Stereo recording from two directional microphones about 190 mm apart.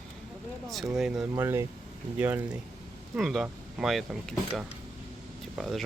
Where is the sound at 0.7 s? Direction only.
Centre (ahead or behind).